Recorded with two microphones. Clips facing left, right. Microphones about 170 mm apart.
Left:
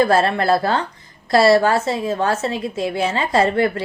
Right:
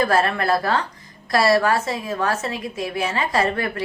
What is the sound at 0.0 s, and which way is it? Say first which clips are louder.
A woman's voice: left 4 dB; 30° left (ahead or behind).